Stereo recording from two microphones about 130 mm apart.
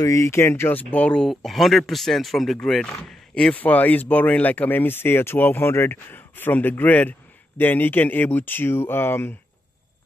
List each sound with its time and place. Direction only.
0.0 s speech: 25° left (ahead or behind)